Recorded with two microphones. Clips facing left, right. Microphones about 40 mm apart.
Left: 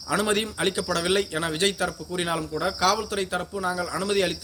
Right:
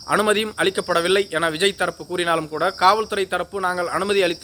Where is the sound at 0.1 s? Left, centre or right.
Right.